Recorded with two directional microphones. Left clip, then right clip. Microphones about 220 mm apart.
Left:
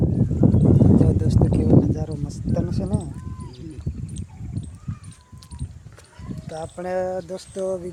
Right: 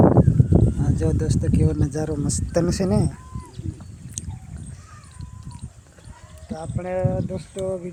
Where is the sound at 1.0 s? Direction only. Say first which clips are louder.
Left 3 dB; 15° right (ahead or behind); by 3.1 s 35° right (ahead or behind).